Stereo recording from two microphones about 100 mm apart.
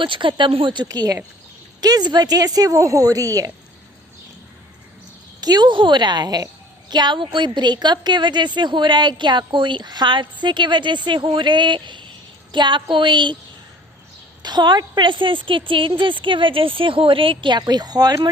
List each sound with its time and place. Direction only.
0.0 s a woman's voice: 55° right (ahead or behind)
0.9 s a woman's voice: 35° right (ahead or behind)
5.4 s a woman's voice: 45° right (ahead or behind)
14.4 s a woman's voice: 50° right (ahead or behind)